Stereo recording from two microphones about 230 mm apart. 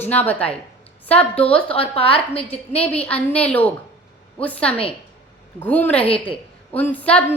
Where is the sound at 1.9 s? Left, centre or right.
Left.